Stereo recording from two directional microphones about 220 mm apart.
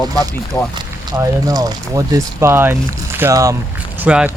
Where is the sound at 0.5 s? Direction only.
10° left (ahead or behind).